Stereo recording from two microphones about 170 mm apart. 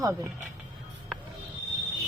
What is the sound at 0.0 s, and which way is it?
Speech, 20° right (ahead or behind).